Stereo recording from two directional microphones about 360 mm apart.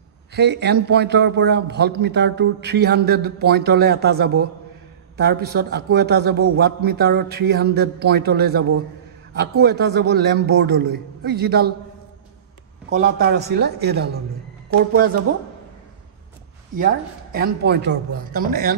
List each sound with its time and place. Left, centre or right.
0.3 s a man's voice: right
12.9 s a man's voice: right
16.7 s a man's voice: right